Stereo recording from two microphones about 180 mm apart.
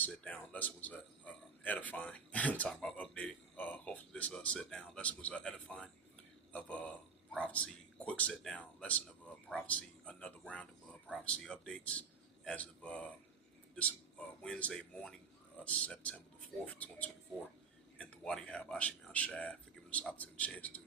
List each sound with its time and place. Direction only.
0.0 s a man's voice: 10° left (ahead or behind)